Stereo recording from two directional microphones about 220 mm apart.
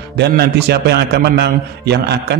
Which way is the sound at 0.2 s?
50° right (ahead or behind).